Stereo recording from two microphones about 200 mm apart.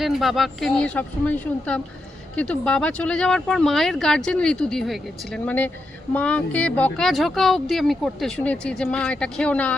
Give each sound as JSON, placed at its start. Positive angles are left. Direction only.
{"t": 0.0, "sound": "speech", "side_deg": 0}